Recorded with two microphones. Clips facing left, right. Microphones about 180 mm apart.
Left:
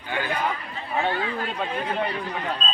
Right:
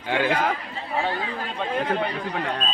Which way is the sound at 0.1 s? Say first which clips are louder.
Right 4 dB; 90° right.